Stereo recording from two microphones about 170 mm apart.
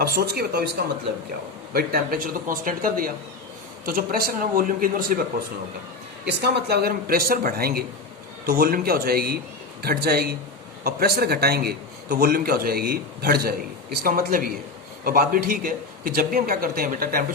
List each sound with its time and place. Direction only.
0.0 s speech: 65° right (ahead or behind)
1.7 s a man's voice: 60° right (ahead or behind)
6.4 s a man's voice: 70° right (ahead or behind)